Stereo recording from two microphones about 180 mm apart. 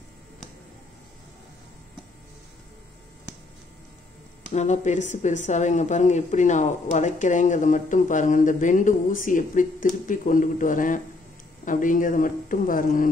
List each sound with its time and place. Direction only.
4.5 s a woman's voice: 40° left (ahead or behind)